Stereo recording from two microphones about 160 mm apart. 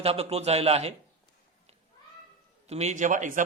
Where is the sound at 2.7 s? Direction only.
45° right (ahead or behind).